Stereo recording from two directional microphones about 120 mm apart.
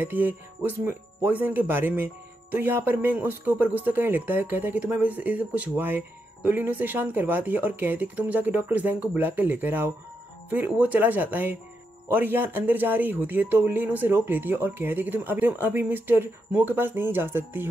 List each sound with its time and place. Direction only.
0.0 s speech: 15° right (ahead or behind)